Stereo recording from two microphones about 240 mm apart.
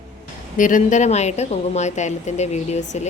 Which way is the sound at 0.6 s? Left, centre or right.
Left.